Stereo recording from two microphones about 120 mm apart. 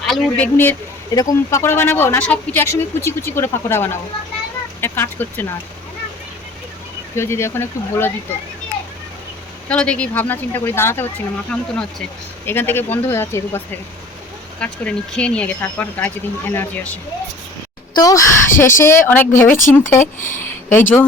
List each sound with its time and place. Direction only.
0.0 s speech: 5° left (ahead or behind)
1.1 s speech: 30° left (ahead or behind); by 2.6 s 10° left (ahead or behind)
2.6 s speech: 25° left (ahead or behind)
7.2 s speech: 20° left (ahead or behind)
9.6 s speech: 10° left (ahead or behind)
11.5 s speech: 10° left (ahead or behind)
14.6 s speech: 10° left (ahead or behind)
17.9 s speech: 30° left (ahead or behind)